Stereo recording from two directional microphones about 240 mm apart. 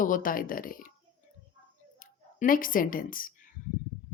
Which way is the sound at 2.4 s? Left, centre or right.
Left.